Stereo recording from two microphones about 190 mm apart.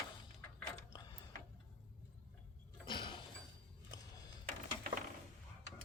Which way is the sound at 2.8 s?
25° left (ahead or behind).